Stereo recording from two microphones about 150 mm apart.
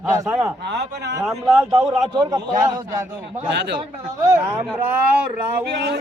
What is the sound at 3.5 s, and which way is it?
Speech, 90° right.